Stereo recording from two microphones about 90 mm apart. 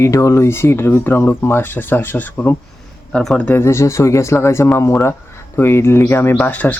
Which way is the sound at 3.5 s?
30° left (ahead or behind).